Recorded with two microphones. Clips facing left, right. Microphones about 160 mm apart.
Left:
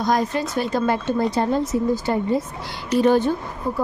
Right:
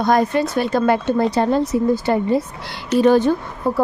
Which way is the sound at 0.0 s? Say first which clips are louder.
Right 5 dB; 60° right (ahead or behind).